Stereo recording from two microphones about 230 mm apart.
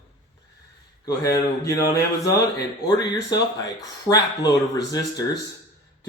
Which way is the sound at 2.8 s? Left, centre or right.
Centre.